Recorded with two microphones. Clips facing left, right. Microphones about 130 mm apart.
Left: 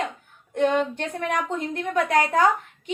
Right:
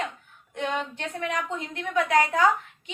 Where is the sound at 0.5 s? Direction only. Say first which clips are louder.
Left 8 dB; 45° left (ahead or behind).